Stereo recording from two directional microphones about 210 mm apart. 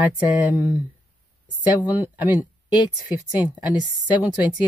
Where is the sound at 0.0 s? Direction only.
5° right (ahead or behind).